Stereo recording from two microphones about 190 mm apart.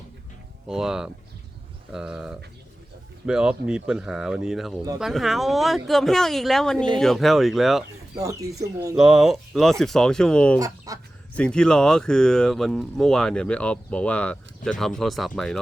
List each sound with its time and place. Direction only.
0.7 s speech: 5° right (ahead or behind)
8.2 s speech: 15° right (ahead or behind)
9.0 s speech: 5° right (ahead or behind)
10.6 s speech: 20° right (ahead or behind)
11.3 s speech: 5° left (ahead or behind)